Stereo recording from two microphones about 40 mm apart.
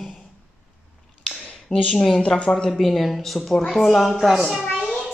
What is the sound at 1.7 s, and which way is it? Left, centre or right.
Speech, left.